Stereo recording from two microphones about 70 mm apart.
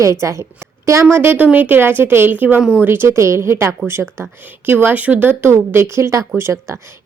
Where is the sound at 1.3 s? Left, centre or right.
Right.